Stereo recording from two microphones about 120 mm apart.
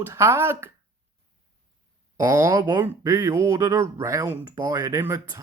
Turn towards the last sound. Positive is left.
turn(degrees=-25)  # may be behind; listen again after turning